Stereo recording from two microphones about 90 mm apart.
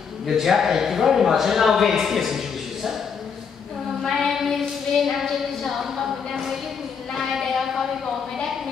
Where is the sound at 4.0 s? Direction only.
Centre (ahead or behind).